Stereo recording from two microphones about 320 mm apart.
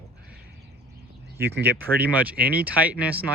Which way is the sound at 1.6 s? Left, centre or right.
Centre.